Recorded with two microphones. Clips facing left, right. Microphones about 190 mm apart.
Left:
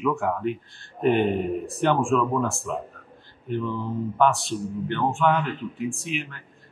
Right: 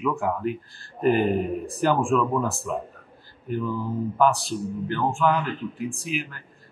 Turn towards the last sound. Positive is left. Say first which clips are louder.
# right 1 dB
turn(degrees=-5)  # may be behind; listen again after turning